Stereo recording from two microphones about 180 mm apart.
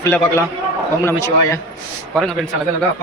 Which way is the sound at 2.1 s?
Centre (ahead or behind).